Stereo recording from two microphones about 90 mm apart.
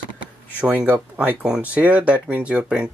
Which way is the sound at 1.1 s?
15° right (ahead or behind).